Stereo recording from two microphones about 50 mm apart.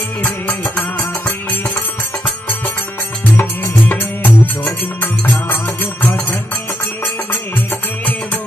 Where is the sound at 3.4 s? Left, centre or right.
Left.